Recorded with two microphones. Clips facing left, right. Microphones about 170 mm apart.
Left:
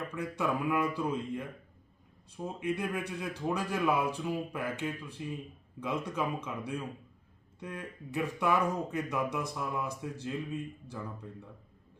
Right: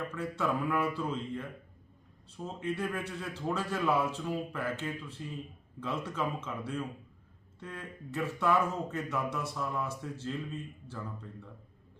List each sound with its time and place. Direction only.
0.1 s speech: 15° left (ahead or behind)